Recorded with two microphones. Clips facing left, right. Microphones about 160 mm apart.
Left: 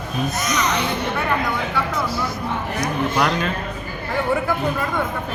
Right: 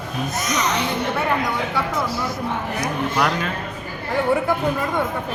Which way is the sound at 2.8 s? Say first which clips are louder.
Left 2 dB; 5° right (ahead or behind).